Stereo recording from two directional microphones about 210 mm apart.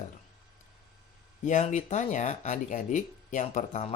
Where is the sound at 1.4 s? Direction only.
35° left (ahead or behind).